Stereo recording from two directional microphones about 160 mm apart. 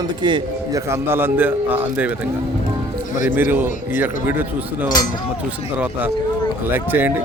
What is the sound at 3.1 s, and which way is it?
Speech, 55° left (ahead or behind).